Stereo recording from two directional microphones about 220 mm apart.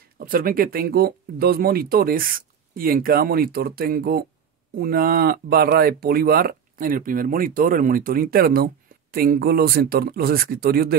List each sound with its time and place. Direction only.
0.2 s speech: 40° right (ahead or behind)